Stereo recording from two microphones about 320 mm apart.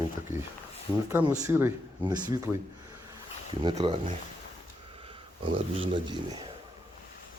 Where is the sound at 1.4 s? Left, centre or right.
Centre.